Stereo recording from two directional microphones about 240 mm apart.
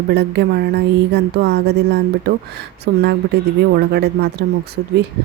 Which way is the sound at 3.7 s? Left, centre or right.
Right.